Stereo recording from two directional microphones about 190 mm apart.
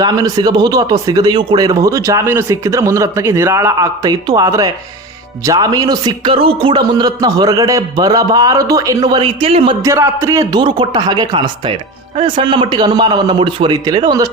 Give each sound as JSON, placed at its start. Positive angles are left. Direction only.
{"t": 0.0, "sound": "a man's voice", "side_deg": -20}
{"t": 9.8, "sound": "a man's voice", "side_deg": -15}